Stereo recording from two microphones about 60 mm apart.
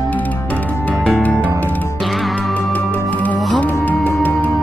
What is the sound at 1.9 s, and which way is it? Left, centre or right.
Music, centre.